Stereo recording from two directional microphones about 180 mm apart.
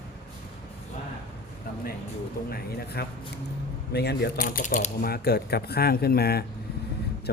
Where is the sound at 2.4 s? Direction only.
60° left (ahead or behind).